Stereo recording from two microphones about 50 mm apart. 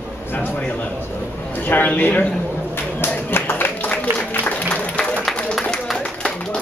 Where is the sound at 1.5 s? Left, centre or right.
Left.